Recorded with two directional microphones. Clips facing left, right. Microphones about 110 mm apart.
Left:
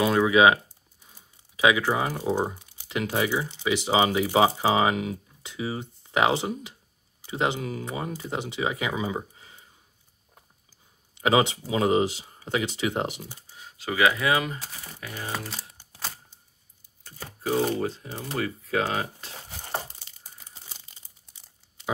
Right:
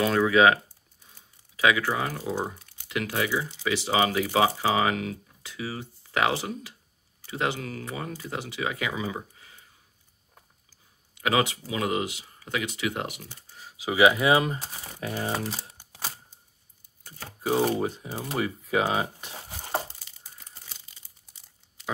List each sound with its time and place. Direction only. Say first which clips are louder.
0.0 s speech: left 1 dB; 15° left (ahead or behind)
10.7 s speech: left 1 dB; 25° left (ahead or behind)
13.2 s speech: left 4 dB; 15° left (ahead or behind)
13.7 s speech: right 3 dB; 15° right (ahead or behind)
14.4 s speech: right 3 dB; 30° right (ahead or behind)
15.3 s typing: right 3 dB; 10° right (ahead or behind)
17.0 s speech: even; 10° right (ahead or behind)